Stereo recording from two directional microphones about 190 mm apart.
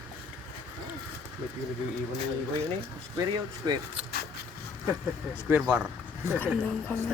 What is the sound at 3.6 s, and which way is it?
Speech, 20° right (ahead or behind).